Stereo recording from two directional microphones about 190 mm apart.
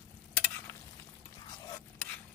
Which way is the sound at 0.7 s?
10° left (ahead or behind).